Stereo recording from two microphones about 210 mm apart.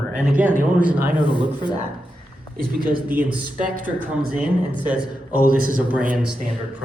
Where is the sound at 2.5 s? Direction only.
45° right (ahead or behind).